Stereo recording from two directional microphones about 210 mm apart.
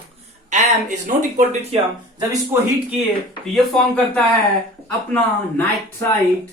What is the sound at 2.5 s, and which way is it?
Speech, 10° right (ahead or behind).